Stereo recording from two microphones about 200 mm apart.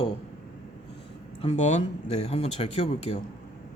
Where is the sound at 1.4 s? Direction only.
35° left (ahead or behind).